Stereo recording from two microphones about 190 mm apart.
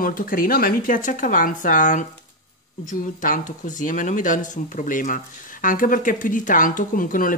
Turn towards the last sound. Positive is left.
turn(degrees=45)  # may be behind; listen again after turning